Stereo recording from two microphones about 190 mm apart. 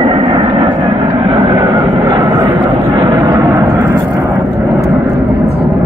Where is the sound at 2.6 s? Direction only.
25° right (ahead or behind).